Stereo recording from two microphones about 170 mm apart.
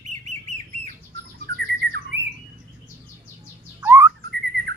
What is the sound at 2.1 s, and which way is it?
Squawk, 90° right.